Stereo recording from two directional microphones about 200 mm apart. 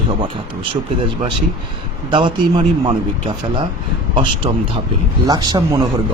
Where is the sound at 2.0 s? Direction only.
25° right (ahead or behind).